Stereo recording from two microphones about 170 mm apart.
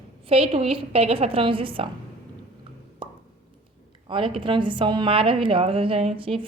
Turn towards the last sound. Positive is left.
turn(degrees=-30)  # may be behind; listen again after turning